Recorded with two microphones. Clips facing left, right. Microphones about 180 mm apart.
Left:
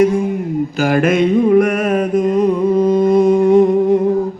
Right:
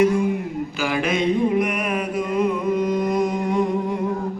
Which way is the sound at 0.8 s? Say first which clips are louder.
Left 9 dB; 45° left (ahead or behind).